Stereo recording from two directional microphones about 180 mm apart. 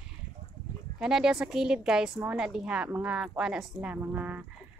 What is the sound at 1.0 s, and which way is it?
A woman's voice, 5° right (ahead or behind).